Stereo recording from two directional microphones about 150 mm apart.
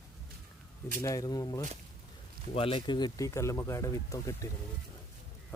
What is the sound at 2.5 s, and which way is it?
Speech, 40° left (ahead or behind).